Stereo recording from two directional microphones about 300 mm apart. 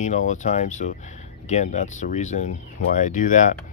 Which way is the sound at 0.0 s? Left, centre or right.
Left.